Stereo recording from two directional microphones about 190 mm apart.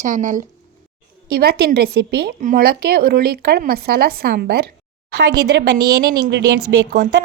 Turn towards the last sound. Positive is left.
turn(degrees=-60)  # may be behind; listen again after turning